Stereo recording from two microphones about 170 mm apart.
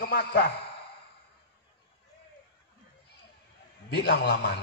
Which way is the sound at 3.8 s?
80° left.